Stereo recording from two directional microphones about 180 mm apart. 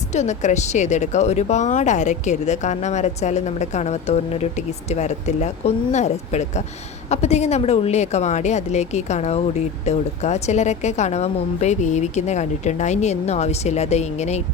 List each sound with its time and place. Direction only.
0.1 s speech: 40° left (ahead or behind)